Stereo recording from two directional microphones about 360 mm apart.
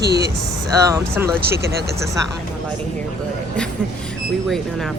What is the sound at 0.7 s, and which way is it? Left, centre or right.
Speech, centre.